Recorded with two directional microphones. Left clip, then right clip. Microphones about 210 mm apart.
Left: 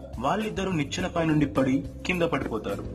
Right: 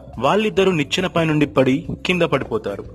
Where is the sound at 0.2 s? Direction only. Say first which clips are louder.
Right 11 dB; 45° right (ahead or behind).